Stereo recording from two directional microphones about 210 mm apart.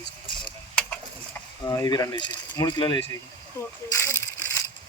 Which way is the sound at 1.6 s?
15° left (ahead or behind).